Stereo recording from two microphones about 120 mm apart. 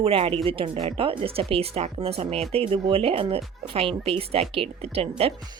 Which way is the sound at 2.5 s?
45° right (ahead or behind).